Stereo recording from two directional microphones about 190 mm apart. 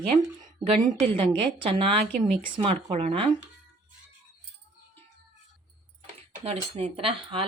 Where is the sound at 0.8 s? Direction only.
30° right (ahead or behind).